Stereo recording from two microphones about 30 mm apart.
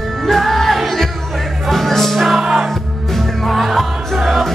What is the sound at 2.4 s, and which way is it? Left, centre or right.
Music, centre.